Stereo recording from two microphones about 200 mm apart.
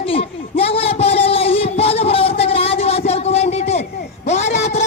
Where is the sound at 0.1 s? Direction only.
30° left (ahead or behind).